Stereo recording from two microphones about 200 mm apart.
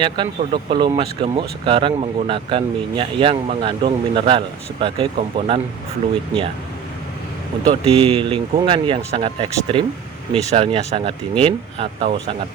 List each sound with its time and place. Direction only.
0.0 s speech: 25° right (ahead or behind)
7.6 s speech: 25° right (ahead or behind)